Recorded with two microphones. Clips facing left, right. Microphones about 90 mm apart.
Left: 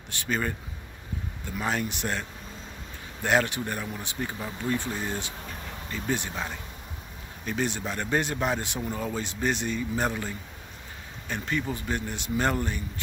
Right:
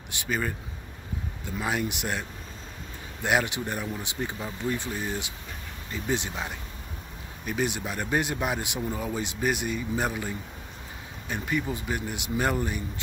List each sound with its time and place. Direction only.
0.3 s speech: 5° right (ahead or behind)